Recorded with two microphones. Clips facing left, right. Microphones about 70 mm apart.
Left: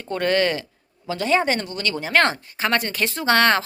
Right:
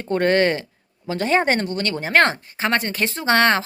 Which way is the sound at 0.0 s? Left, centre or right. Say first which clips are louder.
Right 3 dB; right.